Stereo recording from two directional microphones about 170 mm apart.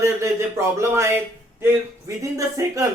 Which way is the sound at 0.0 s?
15° right (ahead or behind).